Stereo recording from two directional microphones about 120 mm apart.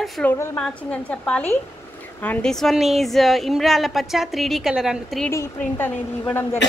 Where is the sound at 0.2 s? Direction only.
15° left (ahead or behind); by 5.2 s 5° right (ahead or behind).